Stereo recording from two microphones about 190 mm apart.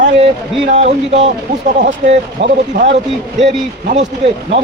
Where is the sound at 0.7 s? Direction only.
35° right (ahead or behind).